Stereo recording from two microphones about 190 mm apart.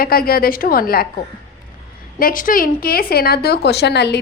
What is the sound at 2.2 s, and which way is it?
A woman's voice, 45° left (ahead or behind).